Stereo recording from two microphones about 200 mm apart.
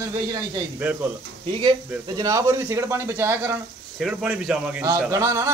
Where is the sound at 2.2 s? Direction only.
15° right (ahead or behind).